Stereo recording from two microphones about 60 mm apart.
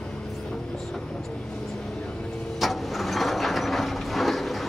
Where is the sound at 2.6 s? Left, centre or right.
Centre.